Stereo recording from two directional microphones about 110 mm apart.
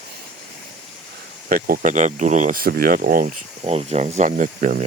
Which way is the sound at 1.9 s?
90° right.